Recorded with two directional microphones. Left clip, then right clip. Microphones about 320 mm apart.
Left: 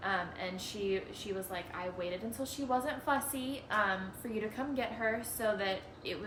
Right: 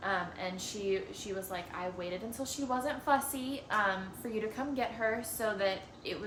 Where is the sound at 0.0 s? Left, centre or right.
Centre.